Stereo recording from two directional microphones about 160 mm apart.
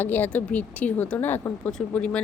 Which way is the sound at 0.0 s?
10° left (ahead or behind).